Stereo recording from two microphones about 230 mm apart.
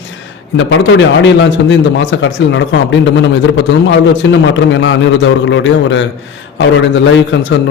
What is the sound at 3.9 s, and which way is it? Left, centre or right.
Speech, left.